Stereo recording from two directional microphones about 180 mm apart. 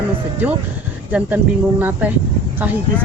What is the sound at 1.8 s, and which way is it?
Speech, 10° right (ahead or behind).